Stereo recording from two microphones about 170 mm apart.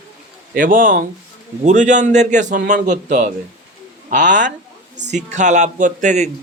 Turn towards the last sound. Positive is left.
turn(degrees=-45)  # may be behind; listen again after turning